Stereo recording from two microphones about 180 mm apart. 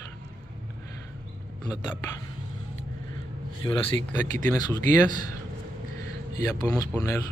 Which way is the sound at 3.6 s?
20° left (ahead or behind).